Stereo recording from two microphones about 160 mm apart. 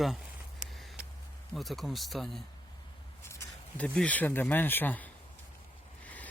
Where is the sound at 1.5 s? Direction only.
Centre (ahead or behind).